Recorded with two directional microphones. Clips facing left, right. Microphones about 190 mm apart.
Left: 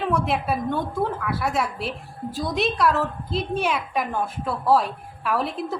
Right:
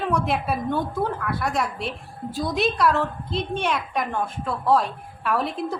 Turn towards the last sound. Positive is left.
turn(degrees=0)  # may be behind; listen again after turning